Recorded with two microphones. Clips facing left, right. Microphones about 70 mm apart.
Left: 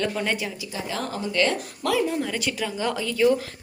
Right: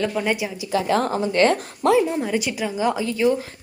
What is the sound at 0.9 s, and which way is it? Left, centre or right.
Speech, right.